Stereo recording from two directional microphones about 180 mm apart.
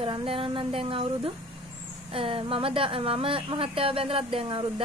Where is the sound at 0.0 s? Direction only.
30° right (ahead or behind).